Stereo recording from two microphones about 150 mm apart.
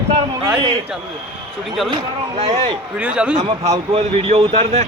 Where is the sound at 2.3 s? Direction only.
40° right (ahead or behind).